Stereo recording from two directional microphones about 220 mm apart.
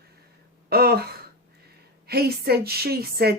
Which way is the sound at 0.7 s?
45° right (ahead or behind).